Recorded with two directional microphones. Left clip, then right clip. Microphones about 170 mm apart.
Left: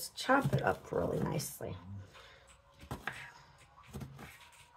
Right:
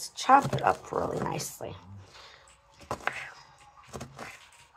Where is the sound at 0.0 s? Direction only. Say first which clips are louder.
Right 10 dB; 30° left (ahead or behind).